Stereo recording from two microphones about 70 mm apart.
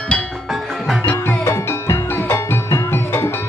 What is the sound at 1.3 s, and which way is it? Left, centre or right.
Music, left.